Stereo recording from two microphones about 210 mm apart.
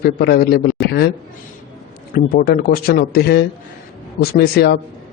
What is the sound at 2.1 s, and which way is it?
A man's voice, 45° left (ahead or behind).